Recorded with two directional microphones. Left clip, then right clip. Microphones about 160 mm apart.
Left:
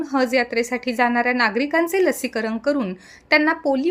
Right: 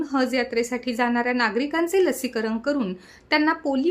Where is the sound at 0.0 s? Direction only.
25° left (ahead or behind).